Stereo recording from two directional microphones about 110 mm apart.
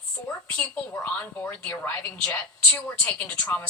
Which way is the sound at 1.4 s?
15° left (ahead or behind).